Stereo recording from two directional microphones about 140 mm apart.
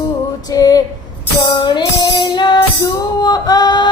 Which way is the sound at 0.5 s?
25° left (ahead or behind).